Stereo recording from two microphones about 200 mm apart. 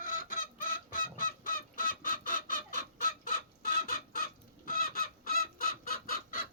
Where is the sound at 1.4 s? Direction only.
45° left (ahead or behind).